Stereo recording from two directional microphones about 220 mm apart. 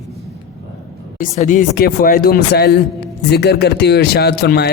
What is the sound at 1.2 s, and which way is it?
Speech, 35° left (ahead or behind).